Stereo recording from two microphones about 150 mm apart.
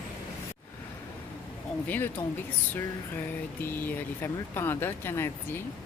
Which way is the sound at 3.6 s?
15° left (ahead or behind).